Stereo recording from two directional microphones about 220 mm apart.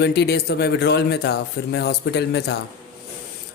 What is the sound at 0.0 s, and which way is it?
Speech, 45° left (ahead or behind).